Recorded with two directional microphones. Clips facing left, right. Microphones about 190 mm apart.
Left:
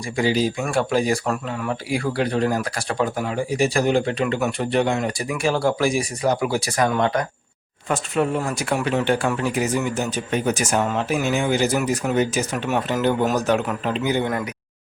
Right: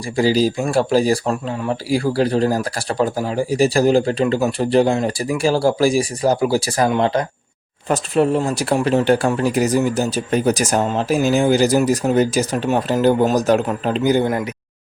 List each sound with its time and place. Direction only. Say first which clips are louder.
0.2 s speech: right 4 dB; 35° right (ahead or behind)